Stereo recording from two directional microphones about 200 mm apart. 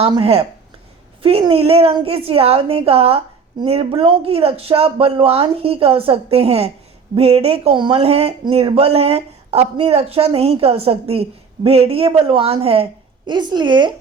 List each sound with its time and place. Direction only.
0.0 s speech: 25° right (ahead or behind)